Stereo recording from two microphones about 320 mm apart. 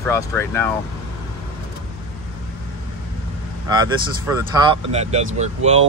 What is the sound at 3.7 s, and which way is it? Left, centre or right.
Speech, centre.